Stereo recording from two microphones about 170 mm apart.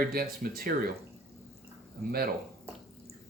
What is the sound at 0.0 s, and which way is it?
Speech, 60° right (ahead or behind).